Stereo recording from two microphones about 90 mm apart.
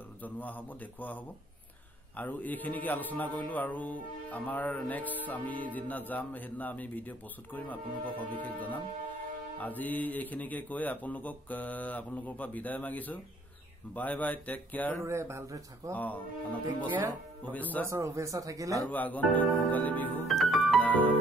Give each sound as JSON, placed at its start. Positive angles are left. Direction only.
{"t": 0.2, "sound": "speech", "side_deg": 20}
{"t": 15.0, "sound": "speech", "side_deg": -30}
{"t": 15.9, "sound": "speech", "side_deg": 20}
{"t": 17.5, "sound": "speech", "side_deg": 20}
{"t": 17.8, "sound": "speech", "side_deg": -35}
{"t": 18.9, "sound": "speech", "side_deg": 20}
{"t": 20.2, "sound": "music", "side_deg": 0}
{"t": 20.8, "sound": "keyboard", "side_deg": 20}